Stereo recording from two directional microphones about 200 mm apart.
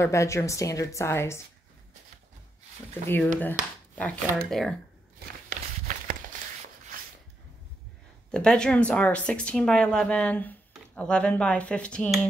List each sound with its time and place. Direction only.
0.0 s a woman's voice: 15° left (ahead or behind)
3.3 s speech: 5° left (ahead or behind)
5.5 s walk: 40° right (ahead or behind)
6.3 s a sound: 40° right (ahead or behind)
8.3 s speech: 5° left (ahead or behind)